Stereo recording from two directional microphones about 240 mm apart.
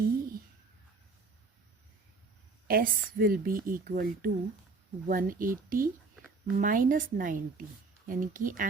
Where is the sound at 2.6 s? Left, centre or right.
Right.